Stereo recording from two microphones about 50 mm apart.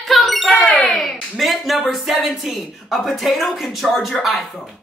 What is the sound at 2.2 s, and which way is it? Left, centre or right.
A woman's voice, centre.